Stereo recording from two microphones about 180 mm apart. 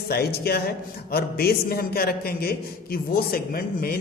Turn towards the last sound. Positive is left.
turn(degrees=55)  # may be behind; listen again after turning